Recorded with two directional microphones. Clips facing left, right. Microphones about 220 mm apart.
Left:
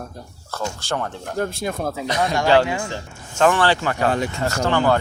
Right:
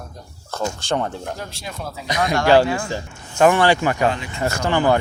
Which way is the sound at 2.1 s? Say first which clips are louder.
Right 2 dB; 15° right (ahead or behind).